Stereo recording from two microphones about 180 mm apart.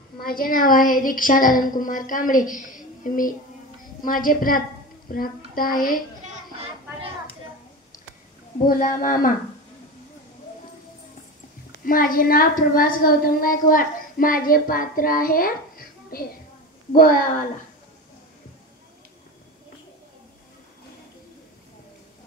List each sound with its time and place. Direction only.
0.2 s a woman's voice: 50° left (ahead or behind)
8.6 s a woman's voice: 50° left (ahead or behind)
11.8 s a woman's voice: 50° left (ahead or behind)